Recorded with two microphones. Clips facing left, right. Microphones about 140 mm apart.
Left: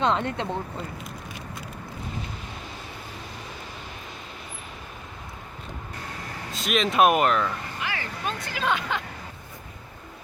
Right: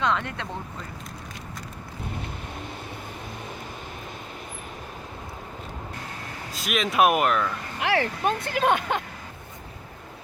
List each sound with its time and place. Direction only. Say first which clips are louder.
0.0 s speech: left 2 dB; 25° left (ahead or behind)
6.5 s speech: left 2 dB; 5° right (ahead or behind)
7.8 s speech: right 13 dB; 70° right (ahead or behind); by 9.0 s 50° right (ahead or behind)